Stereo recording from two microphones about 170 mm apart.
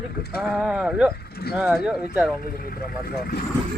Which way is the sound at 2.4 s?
60° left (ahead or behind).